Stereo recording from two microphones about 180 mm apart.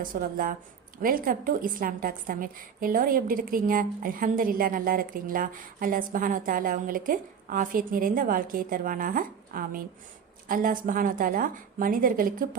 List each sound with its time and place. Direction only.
0.0 s a woman's voice: 50° right (ahead or behind)